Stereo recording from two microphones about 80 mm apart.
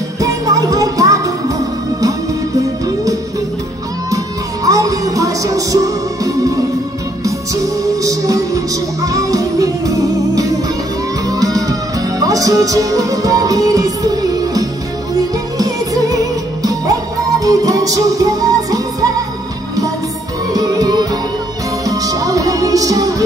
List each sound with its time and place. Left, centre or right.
0.2 s music: right
4.6 s music: right
20.5 s music: right